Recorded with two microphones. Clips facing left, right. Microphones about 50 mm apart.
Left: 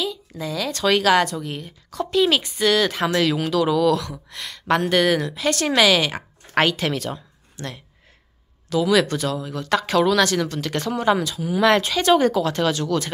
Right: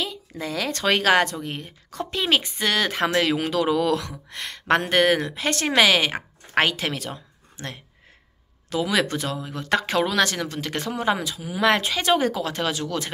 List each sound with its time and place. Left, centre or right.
0.4 s a woman's voice: right
6.5 s speech: centre
7.5 s speech: right